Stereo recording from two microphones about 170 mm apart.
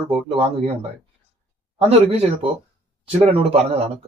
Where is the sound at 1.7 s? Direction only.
35° right (ahead or behind).